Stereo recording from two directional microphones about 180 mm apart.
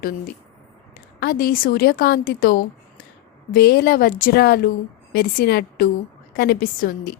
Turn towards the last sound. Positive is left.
turn(degrees=55)  # may be behind; listen again after turning